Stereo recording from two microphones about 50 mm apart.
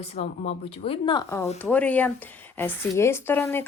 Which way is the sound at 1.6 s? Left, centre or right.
Left.